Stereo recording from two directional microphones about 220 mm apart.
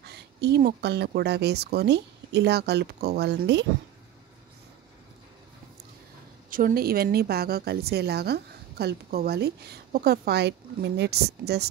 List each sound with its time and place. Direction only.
0.0 s a woman's voice: 50° right (ahead or behind)
6.5 s a woman's voice: 40° right (ahead or behind)